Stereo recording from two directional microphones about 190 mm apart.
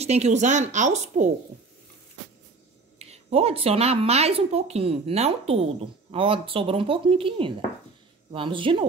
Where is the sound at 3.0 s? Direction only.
35° right (ahead or behind).